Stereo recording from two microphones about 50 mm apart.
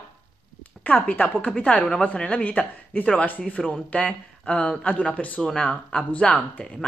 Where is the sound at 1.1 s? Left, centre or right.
Left.